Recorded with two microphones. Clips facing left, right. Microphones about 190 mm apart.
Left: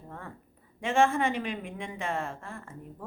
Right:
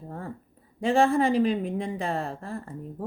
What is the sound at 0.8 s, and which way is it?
A woman's voice, 35° right (ahead or behind).